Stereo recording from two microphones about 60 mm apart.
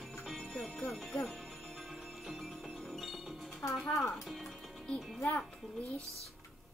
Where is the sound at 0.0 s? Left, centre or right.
Centre.